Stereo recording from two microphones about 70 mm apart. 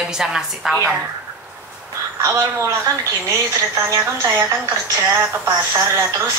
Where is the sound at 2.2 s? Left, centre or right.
Right.